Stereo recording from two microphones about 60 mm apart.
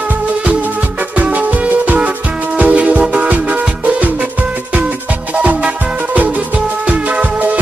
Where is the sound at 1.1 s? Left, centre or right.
Right.